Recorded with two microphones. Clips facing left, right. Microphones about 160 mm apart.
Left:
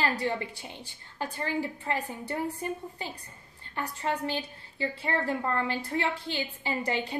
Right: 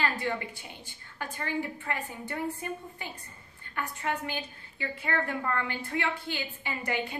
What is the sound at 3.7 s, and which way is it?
A woman's voice, 30° left (ahead or behind).